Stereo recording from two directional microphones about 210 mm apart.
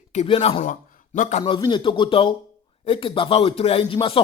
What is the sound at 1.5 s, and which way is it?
Speech, 20° left (ahead or behind).